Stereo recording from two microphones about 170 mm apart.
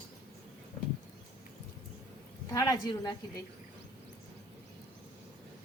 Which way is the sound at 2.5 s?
20° left (ahead or behind).